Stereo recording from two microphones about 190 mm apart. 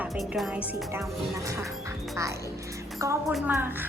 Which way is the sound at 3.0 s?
15° right (ahead or behind).